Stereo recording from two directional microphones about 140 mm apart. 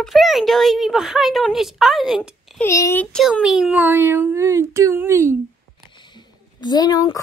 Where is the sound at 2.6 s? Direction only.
20° left (ahead or behind).